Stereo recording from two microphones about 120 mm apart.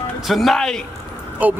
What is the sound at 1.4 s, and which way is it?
Speech, 15° right (ahead or behind).